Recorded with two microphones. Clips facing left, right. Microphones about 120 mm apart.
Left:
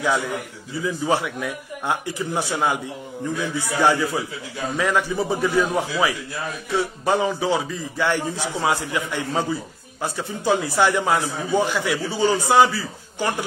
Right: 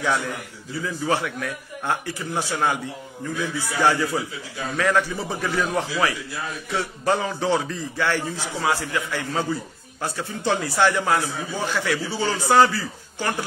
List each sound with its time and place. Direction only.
0.8 s a man's voice: 15° left (ahead or behind)